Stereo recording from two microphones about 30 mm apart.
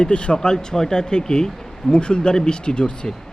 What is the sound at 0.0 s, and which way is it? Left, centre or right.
Speech, left.